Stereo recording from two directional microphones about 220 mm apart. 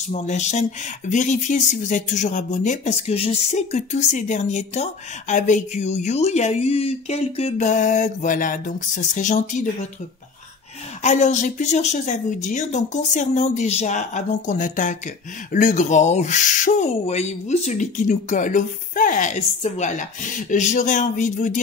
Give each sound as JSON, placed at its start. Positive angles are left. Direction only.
{"t": 0.1, "sound": "speech", "side_deg": 30}
{"t": 11.0, "sound": "speech", "side_deg": 30}